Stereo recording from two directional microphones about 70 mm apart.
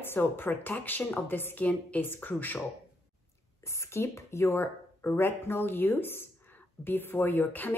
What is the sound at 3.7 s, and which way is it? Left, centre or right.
A woman's voice, left.